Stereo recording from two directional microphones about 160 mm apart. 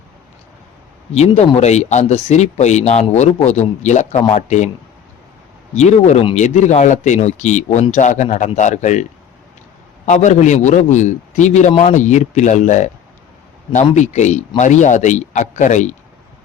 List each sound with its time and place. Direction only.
1.1 s speech: 45° left (ahead or behind)
4.2 s speech: 30° left (ahead or behind)
4.4 s speech: 45° left (ahead or behind)
5.7 s speech: 45° left (ahead or behind)
10.1 s speech: 50° left (ahead or behind)
13.9 s speech: 50° left (ahead or behind)